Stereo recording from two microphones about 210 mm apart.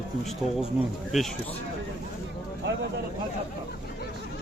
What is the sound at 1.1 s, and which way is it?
Speech, centre (ahead or behind).